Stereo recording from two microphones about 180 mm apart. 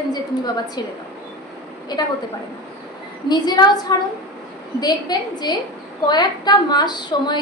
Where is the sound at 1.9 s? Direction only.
25° left (ahead or behind).